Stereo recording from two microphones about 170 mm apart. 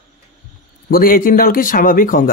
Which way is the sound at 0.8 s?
60° left (ahead or behind).